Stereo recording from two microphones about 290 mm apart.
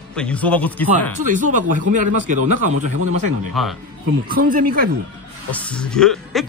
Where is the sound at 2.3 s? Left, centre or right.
Right.